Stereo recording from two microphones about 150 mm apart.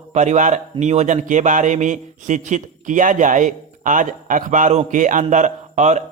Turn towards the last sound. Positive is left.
turn(degrees=-50)  # may be behind; listen again after turning